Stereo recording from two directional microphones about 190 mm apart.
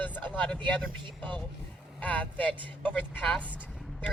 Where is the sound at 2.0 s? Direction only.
10° left (ahead or behind).